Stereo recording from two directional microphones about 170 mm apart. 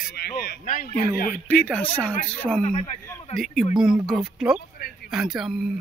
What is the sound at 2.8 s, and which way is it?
Speech, 20° left (ahead or behind).